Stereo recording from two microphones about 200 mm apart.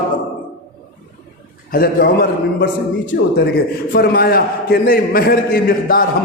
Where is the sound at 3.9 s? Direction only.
50° left (ahead or behind).